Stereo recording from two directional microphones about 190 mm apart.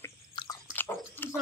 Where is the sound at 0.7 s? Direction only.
10° left (ahead or behind).